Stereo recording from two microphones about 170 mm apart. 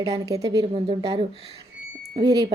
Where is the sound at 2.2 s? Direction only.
20° right (ahead or behind).